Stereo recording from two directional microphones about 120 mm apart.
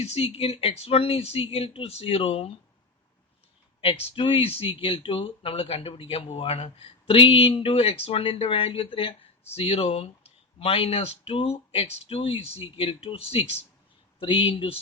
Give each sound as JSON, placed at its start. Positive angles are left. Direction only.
{"t": 0.0, "sound": "speech", "side_deg": 60}
{"t": 4.1, "sound": "speech", "side_deg": 50}
{"t": 14.2, "sound": "speech", "side_deg": 45}